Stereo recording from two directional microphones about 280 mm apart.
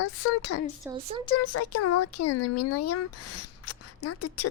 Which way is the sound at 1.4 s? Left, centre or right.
Left.